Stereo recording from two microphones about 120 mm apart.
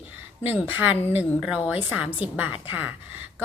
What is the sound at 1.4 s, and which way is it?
A woman's voice, 10° right (ahead or behind).